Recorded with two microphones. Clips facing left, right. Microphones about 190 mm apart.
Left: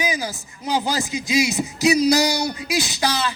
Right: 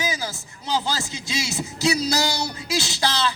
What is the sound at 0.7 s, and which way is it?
Speech, 15° left (ahead or behind).